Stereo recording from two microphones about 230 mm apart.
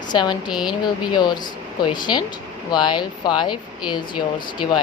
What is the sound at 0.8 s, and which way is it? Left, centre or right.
A woman's voice, centre.